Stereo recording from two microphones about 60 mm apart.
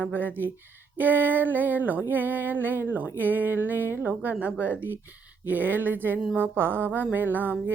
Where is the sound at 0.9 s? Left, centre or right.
Right.